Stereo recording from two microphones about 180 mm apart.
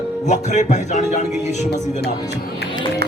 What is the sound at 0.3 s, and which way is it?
A man's voice, 40° left (ahead or behind).